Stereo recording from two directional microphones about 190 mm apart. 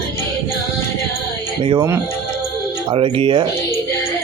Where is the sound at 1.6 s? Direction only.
25° right (ahead or behind).